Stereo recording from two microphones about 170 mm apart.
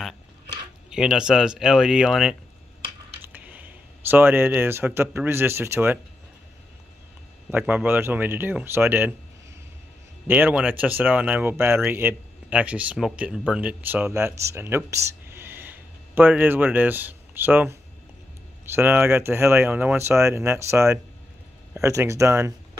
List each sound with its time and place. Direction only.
0.8 s speech: 5° right (ahead or behind)
3.4 s speech: 10° right (ahead or behind)
7.5 s speech: 10° right (ahead or behind)
10.2 s speech: 10° right (ahead or behind)
18.8 s speech: 15° right (ahead or behind)